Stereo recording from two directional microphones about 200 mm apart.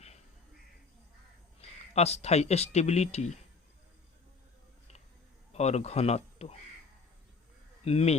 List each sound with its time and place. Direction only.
1.9 s speech: 30° left (ahead or behind)
5.5 s speech: 30° left (ahead or behind)
7.9 s speech: 30° left (ahead or behind)